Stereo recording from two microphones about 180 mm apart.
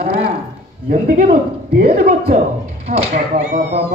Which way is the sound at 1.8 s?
35° right (ahead or behind).